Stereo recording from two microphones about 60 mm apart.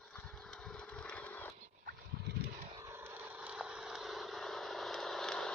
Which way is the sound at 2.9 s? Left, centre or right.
Right.